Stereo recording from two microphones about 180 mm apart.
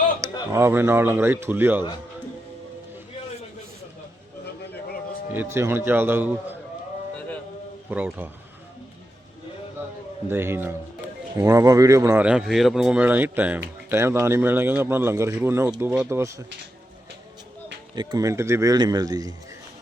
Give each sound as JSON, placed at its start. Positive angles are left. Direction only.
{"t": 0.5, "sound": "a man's voice", "side_deg": -15}
{"t": 5.3, "sound": "a man's voice", "side_deg": -10}
{"t": 7.9, "sound": "a man's voice", "side_deg": -10}
{"t": 10.2, "sound": "a man's voice", "side_deg": -10}
{"t": 12.2, "sound": "a man's voice", "side_deg": -5}
{"t": 17.9, "sound": "speech", "side_deg": -25}